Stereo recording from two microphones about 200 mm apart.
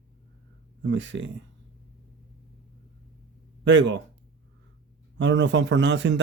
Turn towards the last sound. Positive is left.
turn(degrees=-60)  # may be behind; listen again after turning